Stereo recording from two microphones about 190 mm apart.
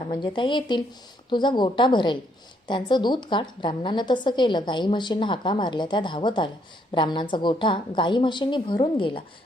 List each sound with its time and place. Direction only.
0.1 s a woman's voice: 25° left (ahead or behind)